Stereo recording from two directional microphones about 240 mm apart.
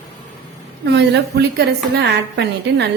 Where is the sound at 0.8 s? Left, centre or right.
Right.